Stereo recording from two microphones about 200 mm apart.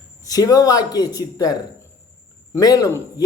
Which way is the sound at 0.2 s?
20° left (ahead or behind).